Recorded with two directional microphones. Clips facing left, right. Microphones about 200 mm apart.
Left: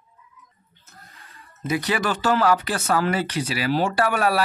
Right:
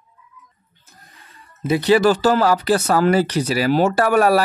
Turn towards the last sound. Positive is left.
turn(degrees=-45)  # may be behind; listen again after turning